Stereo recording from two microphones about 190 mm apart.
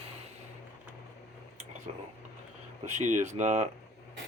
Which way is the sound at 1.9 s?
30° right (ahead or behind).